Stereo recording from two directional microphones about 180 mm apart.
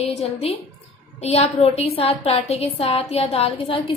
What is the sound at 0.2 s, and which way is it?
A woman's voice, 35° left (ahead or behind).